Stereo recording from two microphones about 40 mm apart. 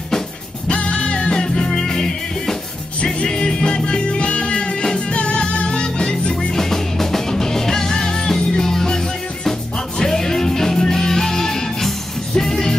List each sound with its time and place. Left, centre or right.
0.7 s music: left
6.5 s music: centre